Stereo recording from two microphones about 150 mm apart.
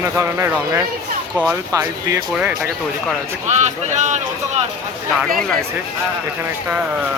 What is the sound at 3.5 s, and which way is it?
Speech, 50° right (ahead or behind).